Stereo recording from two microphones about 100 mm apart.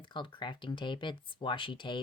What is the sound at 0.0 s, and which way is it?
Speech, 55° left (ahead or behind).